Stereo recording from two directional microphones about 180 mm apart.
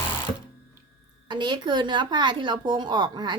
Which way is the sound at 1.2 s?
25° right (ahead or behind).